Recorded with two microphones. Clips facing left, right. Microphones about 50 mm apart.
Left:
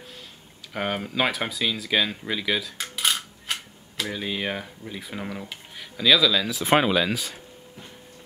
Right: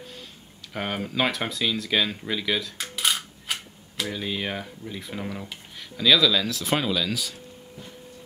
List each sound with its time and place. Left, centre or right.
0.7 s speech: centre
6.6 s speech: left